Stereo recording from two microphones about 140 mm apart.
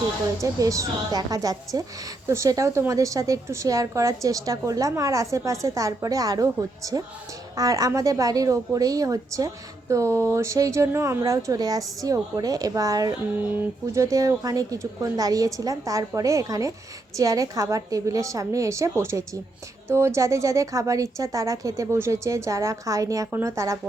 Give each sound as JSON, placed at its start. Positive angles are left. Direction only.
{"t": 0.4, "sound": "a woman's voice", "side_deg": -25}